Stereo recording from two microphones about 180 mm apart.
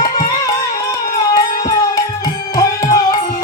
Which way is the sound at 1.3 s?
20° left (ahead or behind).